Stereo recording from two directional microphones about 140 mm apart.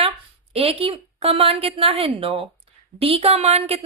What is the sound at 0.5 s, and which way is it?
A woman's voice, 40° right (ahead or behind).